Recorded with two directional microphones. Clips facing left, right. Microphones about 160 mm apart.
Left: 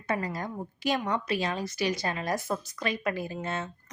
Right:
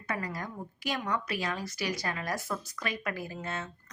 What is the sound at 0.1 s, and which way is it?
A woman's voice, 25° left (ahead or behind).